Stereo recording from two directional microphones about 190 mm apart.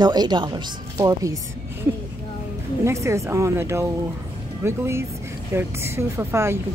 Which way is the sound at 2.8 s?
15° right (ahead or behind).